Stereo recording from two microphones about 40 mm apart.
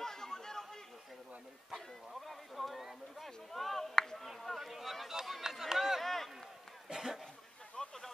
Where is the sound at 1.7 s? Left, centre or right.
Centre.